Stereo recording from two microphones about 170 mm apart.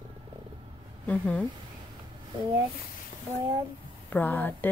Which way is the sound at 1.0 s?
5° left (ahead or behind).